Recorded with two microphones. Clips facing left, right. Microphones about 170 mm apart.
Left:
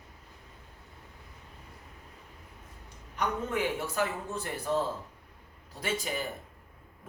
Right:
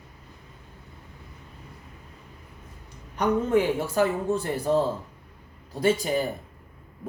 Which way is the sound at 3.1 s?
35° right (ahead or behind).